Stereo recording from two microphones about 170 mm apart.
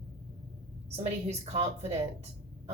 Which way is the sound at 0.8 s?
40° right (ahead or behind).